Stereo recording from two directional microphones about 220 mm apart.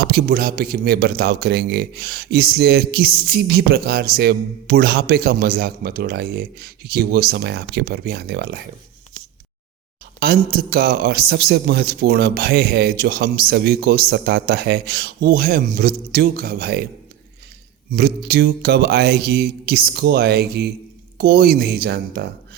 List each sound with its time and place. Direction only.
0.0 s a man's voice: 45° right (ahead or behind)
10.2 s a man's voice: 45° right (ahead or behind)
17.9 s a man's voice: 45° right (ahead or behind)